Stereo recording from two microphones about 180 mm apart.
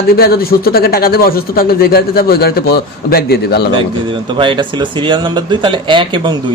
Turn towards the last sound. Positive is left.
turn(degrees=-25)  # may be behind; listen again after turning